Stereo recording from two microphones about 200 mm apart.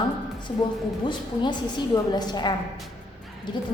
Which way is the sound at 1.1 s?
20° left (ahead or behind).